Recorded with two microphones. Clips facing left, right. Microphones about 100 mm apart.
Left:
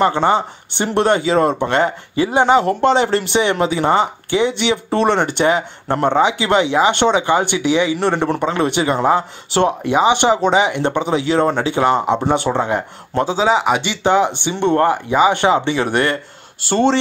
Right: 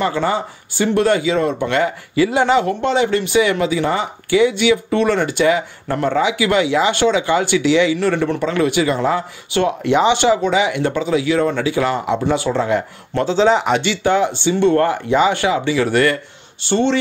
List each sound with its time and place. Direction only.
0.0 s speech: 25° left (ahead or behind)
1.2 s speech: 40° left (ahead or behind)
2.5 s speech: 35° left (ahead or behind)
9.8 s speech: 15° left (ahead or behind)
13.2 s speech: 10° left (ahead or behind)
15.4 s speech: 25° left (ahead or behind)
16.6 s speech: 40° left (ahead or behind)